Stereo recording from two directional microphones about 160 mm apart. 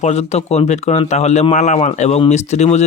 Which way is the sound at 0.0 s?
40° left (ahead or behind).